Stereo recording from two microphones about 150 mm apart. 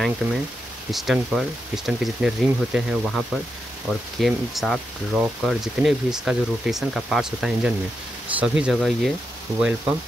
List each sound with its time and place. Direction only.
0.9 s speech: centre (ahead or behind)